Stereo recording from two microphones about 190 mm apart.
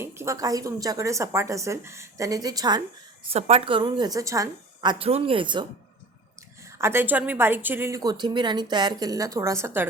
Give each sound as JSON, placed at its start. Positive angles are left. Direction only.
{"t": 0.0, "sound": "a woman's voice", "side_deg": -15}
{"t": 3.2, "sound": "a woman's voice", "side_deg": -35}
{"t": 6.7, "sound": "a woman's voice", "side_deg": -15}